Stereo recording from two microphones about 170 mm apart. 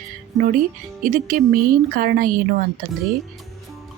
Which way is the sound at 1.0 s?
50° right (ahead or behind).